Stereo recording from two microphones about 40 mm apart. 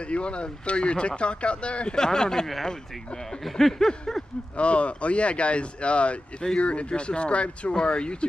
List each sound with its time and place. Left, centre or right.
0.0 s speech: left
2.0 s a sound: centre
4.6 s speech: left